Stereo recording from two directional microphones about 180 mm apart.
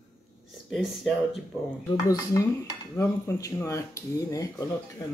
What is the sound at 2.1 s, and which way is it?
Dishes, 20° left (ahead or behind).